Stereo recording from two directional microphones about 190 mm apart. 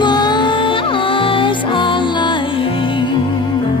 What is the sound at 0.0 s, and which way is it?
Music, 20° left (ahead or behind).